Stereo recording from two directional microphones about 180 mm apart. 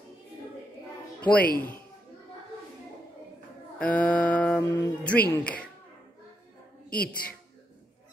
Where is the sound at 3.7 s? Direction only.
5° left (ahead or behind).